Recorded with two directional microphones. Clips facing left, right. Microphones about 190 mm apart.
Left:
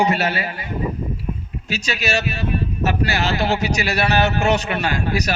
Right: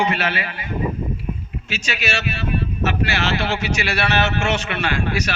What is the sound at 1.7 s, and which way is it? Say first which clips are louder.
Speech: left 3 dB; 40° left (ahead or behind).